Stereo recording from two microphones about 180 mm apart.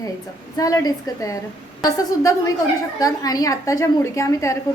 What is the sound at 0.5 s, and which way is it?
A woman's voice, 20° left (ahead or behind).